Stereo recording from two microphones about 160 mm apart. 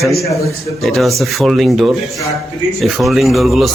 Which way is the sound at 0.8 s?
Centre (ahead or behind).